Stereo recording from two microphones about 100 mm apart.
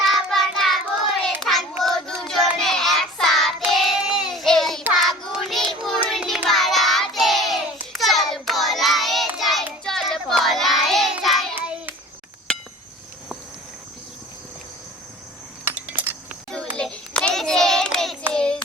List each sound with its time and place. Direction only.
0.0 s child singing: centre (ahead or behind)
11.5 s child singing: 15° right (ahead or behind)
15.6 s a sound: 15° right (ahead or behind)
16.7 s child singing: 10° left (ahead or behind)